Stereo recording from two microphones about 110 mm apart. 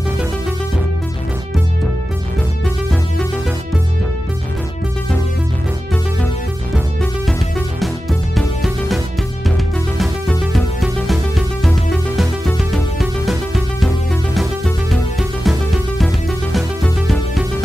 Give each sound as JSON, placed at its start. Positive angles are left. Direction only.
{"t": 7.8, "sound": "music", "side_deg": 0}